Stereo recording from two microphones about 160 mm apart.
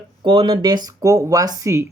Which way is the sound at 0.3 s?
30° right (ahead or behind).